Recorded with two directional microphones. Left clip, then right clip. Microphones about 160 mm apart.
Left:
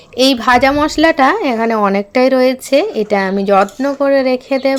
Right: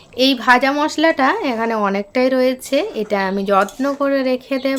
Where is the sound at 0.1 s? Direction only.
25° left (ahead or behind).